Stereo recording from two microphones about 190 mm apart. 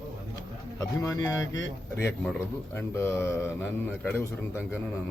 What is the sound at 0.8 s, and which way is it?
Speech, 15° left (ahead or behind).